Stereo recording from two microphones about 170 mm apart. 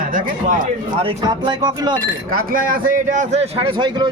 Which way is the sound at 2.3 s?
55° right (ahead or behind).